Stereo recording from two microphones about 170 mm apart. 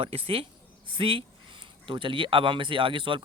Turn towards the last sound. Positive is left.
turn(degrees=-30)  # may be behind; listen again after turning